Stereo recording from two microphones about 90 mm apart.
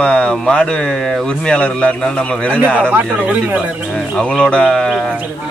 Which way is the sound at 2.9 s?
15° right (ahead or behind).